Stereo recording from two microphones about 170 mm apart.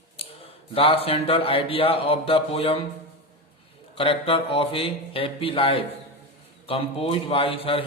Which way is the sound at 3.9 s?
30° left (ahead or behind).